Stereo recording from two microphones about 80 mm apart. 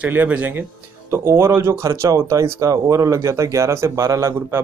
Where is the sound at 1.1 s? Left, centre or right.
Right.